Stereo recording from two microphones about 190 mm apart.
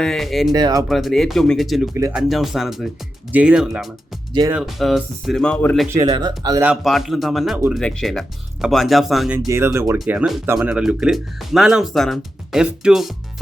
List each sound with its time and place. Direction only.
0.0 s speech: centre (ahead or behind)
0.5 s speech: 20° right (ahead or behind)
0.9 s speech: centre (ahead or behind)
6.0 s speech: 20° right (ahead or behind)
6.6 s speech: 5° right (ahead or behind)
9.5 s speech: 15° right (ahead or behind)